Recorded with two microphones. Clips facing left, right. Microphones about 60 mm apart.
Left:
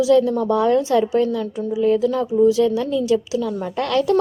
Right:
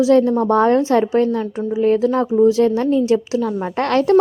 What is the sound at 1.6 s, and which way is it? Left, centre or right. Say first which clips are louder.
Speech: right 2 dB; right.